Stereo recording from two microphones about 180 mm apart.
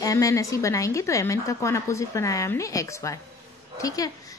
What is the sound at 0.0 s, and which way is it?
A woman's voice, 20° left (ahead or behind).